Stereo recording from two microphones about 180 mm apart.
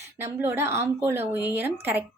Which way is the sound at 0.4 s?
15° right (ahead or behind).